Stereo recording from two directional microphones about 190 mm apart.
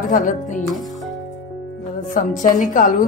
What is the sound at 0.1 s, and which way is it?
Speech, 40° left (ahead or behind).